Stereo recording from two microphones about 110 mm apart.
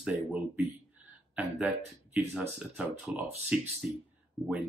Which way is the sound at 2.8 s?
10° right (ahead or behind).